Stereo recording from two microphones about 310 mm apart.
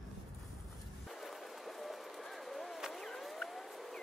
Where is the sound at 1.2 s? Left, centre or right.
Centre.